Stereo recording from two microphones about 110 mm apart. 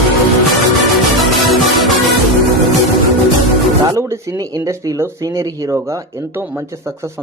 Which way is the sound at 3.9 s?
25° right (ahead or behind).